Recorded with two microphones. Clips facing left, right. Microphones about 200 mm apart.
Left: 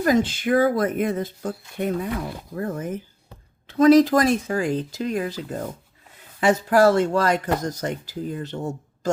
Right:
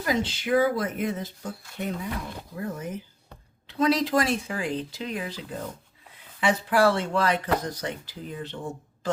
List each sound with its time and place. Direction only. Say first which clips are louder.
0.0 s speech: left 7 dB; 50° left (ahead or behind)